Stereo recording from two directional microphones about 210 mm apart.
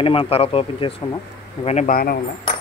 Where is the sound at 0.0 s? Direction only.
25° left (ahead or behind).